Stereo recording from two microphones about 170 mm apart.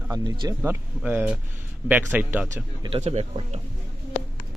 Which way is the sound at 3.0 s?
40° right (ahead or behind).